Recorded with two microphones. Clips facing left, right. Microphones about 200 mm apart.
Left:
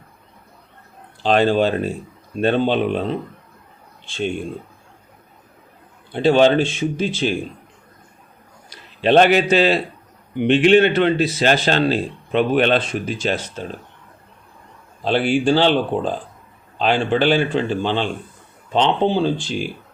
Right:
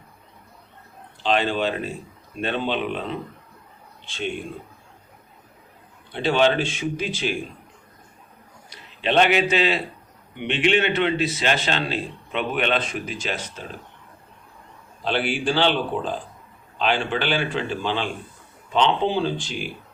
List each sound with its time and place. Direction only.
1.2 s speech: 40° left (ahead or behind)
6.1 s speech: 40° left (ahead or behind)
6.7 s speech: 25° left (ahead or behind)
8.7 s a man's voice: 40° left (ahead or behind)
15.0 s speech: 40° left (ahead or behind)